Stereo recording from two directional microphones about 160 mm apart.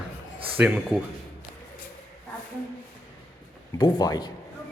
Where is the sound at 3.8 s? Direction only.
25° left (ahead or behind).